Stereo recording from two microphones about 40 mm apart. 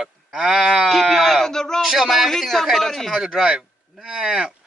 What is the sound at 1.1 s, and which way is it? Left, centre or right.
Speech, centre.